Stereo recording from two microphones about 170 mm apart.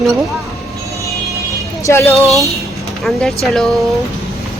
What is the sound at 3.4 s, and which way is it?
Speech, centre (ahead or behind).